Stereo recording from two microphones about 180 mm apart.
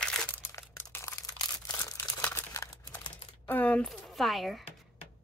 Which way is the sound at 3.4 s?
10° left (ahead or behind).